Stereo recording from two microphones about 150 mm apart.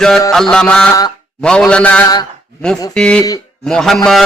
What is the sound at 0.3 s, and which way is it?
A man's voice, 5° left (ahead or behind).